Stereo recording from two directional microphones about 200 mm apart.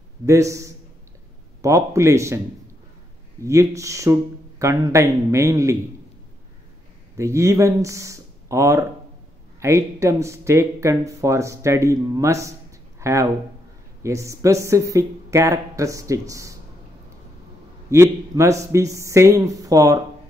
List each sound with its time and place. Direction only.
0.3 s speech: 15° right (ahead or behind)
3.4 s speech: 15° right (ahead or behind)
7.2 s speech: 15° right (ahead or behind)
17.8 s speech: 15° right (ahead or behind)